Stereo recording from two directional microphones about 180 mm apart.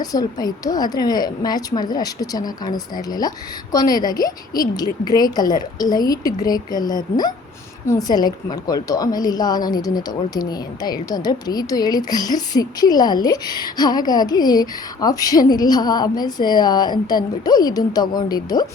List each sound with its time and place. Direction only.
0.0 s a woman's voice: 20° left (ahead or behind)